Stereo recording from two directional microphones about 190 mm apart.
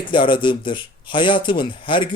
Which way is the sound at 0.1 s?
25° left (ahead or behind).